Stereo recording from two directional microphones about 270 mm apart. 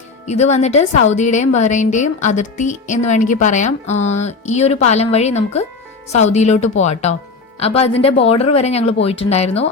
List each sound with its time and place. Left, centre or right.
0.3 s a woman's voice: left